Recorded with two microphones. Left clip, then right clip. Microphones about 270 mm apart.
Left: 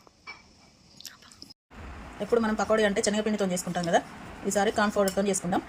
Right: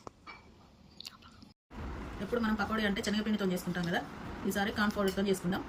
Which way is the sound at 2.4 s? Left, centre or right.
Left.